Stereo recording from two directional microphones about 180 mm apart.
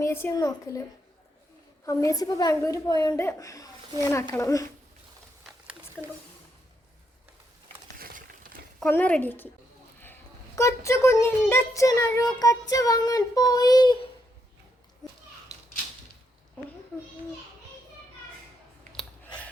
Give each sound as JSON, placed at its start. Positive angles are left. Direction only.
{"t": 0.0, "sound": "a woman's voice", "side_deg": 15}
{"t": 8.8, "sound": "a woman's voice", "side_deg": 10}